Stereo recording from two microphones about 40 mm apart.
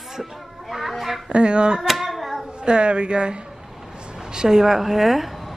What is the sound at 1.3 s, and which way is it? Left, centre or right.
Speech, right.